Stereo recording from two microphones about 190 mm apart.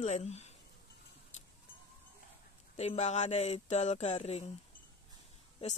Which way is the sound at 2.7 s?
35° left (ahead or behind).